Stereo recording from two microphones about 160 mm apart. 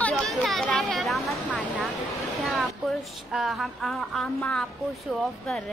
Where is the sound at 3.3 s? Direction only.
Centre (ahead or behind).